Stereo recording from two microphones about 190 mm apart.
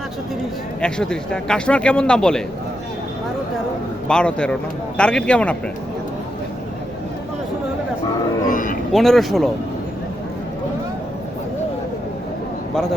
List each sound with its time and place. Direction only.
0.8 s speech: 5° left (ahead or behind)
4.1 s speech: 5° left (ahead or behind)
8.4 s a sound: 45° left (ahead or behind)
8.9 s speech: centre (ahead or behind)